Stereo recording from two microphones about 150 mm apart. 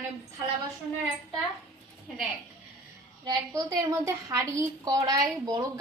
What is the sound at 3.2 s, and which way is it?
A woman's voice, 25° right (ahead or behind).